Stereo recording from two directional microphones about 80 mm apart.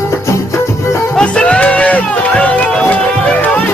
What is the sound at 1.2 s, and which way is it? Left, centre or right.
Music, centre.